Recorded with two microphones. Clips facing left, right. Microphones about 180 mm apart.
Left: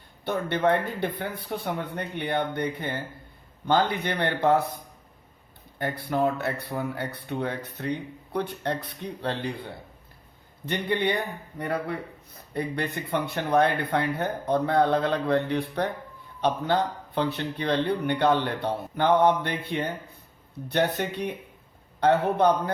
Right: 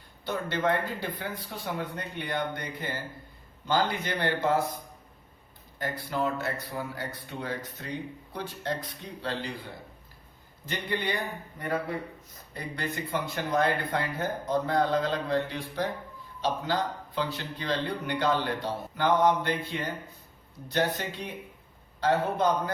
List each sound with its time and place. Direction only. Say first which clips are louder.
0.3 s a man's voice: left 4 dB; 60° left (ahead or behind)
5.8 s a man's voice: left 5 dB; 60° left (ahead or behind)
10.7 s a man's voice: left 5 dB; 60° left (ahead or behind)
12.5 s a man's voice: left 5 dB; 60° left (ahead or behind)
17.2 s a man's voice: left 6 dB; 60° left (ahead or behind)